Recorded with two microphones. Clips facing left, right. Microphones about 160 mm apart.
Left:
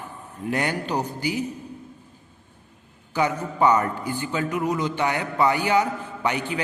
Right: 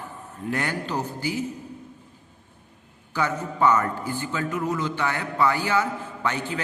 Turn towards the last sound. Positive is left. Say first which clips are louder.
# left 2 dB
turn(degrees=15)  # may be behind; listen again after turning